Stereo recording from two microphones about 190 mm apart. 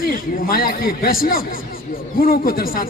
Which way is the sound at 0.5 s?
55° left (ahead or behind).